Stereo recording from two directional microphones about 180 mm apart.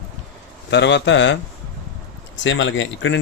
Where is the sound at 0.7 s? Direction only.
80° left.